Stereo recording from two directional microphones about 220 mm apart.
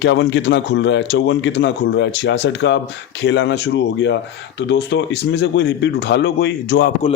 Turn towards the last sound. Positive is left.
turn(degrees=50)  # may be behind; listen again after turning